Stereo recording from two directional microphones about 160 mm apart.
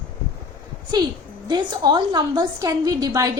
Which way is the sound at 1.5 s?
25° right (ahead or behind).